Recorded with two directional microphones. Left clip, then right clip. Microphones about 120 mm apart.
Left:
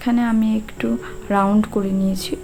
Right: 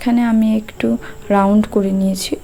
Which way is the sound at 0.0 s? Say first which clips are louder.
Right 4 dB; 40° right (ahead or behind).